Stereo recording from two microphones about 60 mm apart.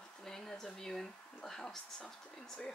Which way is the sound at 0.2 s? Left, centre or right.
Centre.